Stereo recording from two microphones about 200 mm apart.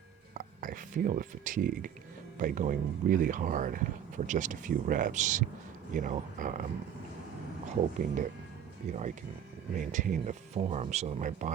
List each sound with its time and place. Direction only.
0.3 s a sound: 40° right (ahead or behind)
2.4 s speech: 45° right (ahead or behind)
7.9 s speech: 40° right (ahead or behind)